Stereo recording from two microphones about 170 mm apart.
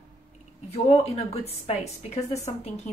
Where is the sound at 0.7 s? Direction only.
35° left (ahead or behind).